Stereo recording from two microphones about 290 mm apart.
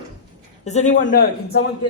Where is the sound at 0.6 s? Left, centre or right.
Left.